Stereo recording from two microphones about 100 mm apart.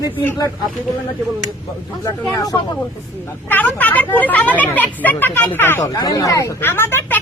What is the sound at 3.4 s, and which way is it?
Speech, 20° left (ahead or behind).